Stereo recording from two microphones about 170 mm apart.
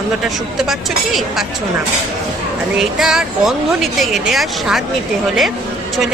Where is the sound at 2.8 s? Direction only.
Centre (ahead or behind).